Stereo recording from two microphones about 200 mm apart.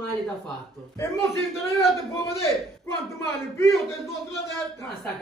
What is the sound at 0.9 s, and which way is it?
Speech, 15° left (ahead or behind).